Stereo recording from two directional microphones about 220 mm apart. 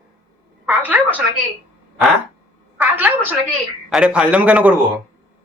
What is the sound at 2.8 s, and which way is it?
A woman's voice, 10° right (ahead or behind).